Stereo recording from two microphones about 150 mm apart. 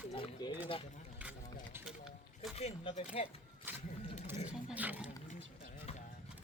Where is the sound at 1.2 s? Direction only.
10° right (ahead or behind).